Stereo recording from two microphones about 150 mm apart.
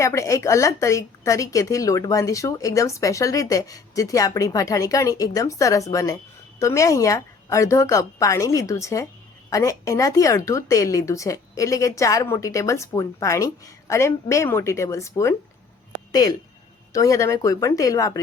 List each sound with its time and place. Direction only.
0.0 s a woman's voice: 20° left (ahead or behind)
16.9 s a woman's voice: 20° left (ahead or behind)